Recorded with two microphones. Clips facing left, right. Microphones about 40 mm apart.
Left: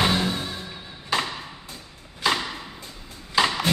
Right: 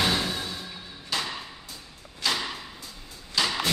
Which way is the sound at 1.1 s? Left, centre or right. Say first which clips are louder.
Left 5 dB; left.